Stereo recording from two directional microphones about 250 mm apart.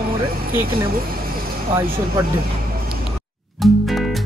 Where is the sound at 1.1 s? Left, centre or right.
Right.